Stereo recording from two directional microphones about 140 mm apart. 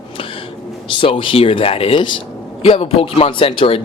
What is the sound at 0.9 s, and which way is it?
A man's voice, 35° left (ahead or behind).